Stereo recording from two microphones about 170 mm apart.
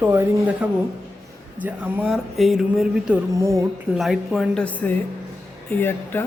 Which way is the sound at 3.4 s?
15° right (ahead or behind).